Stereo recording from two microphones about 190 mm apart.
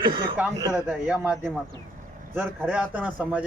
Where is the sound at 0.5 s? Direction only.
20° right (ahead or behind).